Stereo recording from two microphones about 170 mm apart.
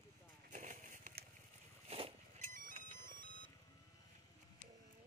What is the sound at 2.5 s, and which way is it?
Music, 50° right (ahead or behind).